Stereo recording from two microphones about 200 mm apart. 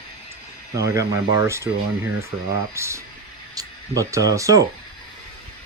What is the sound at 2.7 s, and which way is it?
Speech, 15° right (ahead or behind).